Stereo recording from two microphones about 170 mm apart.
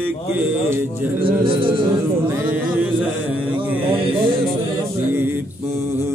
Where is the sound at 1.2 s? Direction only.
30° right (ahead or behind).